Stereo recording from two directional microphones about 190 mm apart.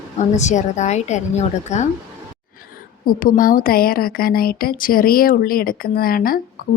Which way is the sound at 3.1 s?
50° left (ahead or behind).